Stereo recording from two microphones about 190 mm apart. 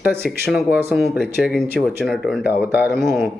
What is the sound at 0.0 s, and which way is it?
Speech, 5° right (ahead or behind).